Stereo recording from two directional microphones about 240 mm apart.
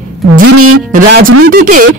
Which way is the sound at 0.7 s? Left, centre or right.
Right.